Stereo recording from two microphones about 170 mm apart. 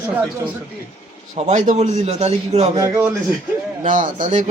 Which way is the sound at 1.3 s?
45° right (ahead or behind).